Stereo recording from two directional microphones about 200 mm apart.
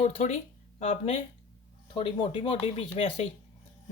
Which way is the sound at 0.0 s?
35° left (ahead or behind).